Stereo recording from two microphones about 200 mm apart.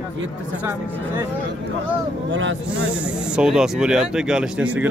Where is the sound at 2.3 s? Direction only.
75° right (ahead or behind).